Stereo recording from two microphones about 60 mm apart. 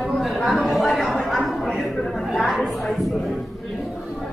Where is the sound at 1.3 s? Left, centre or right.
Centre.